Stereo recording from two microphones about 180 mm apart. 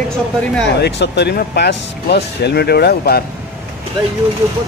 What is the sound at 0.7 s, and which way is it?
Speech, 70° left (ahead or behind).